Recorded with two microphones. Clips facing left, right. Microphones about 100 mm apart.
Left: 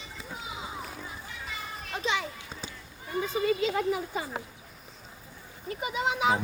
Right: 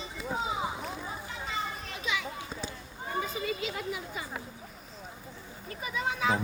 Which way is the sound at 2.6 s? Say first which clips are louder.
Right 4 dB; 35° right (ahead or behind).